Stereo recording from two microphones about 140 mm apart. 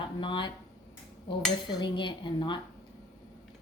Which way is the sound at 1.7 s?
35° left (ahead or behind).